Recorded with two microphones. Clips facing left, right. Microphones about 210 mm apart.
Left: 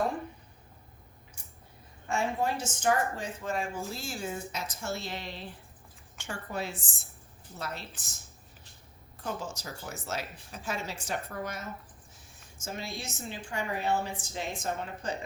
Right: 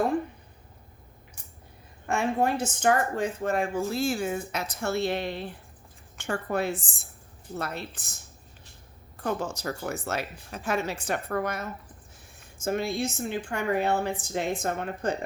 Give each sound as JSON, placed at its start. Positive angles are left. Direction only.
{"t": 2.0, "sound": "a woman's voice", "side_deg": -60}
{"t": 9.2, "sound": "a woman's voice", "side_deg": -60}